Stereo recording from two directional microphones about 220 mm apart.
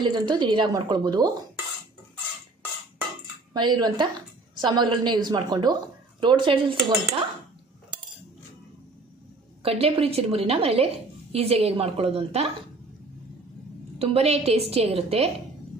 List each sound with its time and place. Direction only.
0.0 s a woman's voice: 20° right (ahead or behind)
3.5 s a woman's voice: 20° right (ahead or behind)
9.6 s a woman's voice: 25° right (ahead or behind)
13.9 s a woman's voice: 30° right (ahead or behind)